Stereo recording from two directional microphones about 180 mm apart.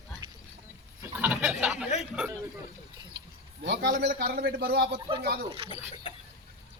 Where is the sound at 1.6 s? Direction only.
5° right (ahead or behind).